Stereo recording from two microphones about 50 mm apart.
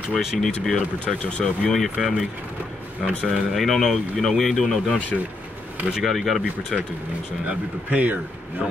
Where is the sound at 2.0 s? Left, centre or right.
Centre.